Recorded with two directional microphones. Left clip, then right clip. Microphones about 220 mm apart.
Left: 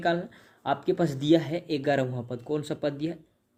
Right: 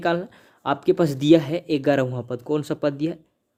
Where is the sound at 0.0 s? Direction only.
50° right (ahead or behind).